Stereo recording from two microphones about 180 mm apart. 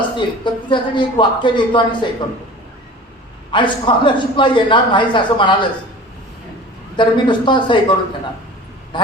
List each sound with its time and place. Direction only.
0.2 s a man's voice: 25° left (ahead or behind)
3.5 s a man's voice: 25° left (ahead or behind)
6.9 s a man's voice: 25° left (ahead or behind)